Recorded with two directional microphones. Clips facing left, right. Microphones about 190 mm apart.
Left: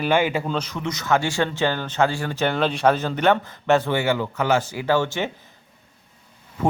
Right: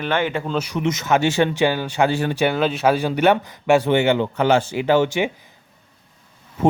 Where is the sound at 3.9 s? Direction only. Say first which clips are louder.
Right 5 dB; 25° right (ahead or behind).